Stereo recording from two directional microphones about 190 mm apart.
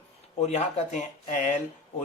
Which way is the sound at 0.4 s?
35° left (ahead or behind).